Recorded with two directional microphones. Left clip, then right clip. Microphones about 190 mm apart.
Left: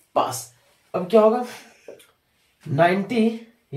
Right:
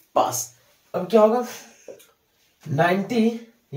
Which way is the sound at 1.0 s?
15° left (ahead or behind).